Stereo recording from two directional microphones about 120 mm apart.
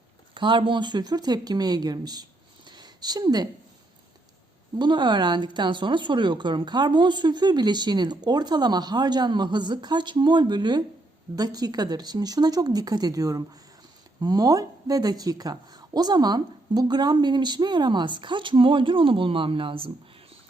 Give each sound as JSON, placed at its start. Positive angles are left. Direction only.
{"t": 0.3, "sound": "speech", "side_deg": -45}
{"t": 2.6, "sound": "a sound", "side_deg": -35}
{"t": 4.8, "sound": "speech", "side_deg": -40}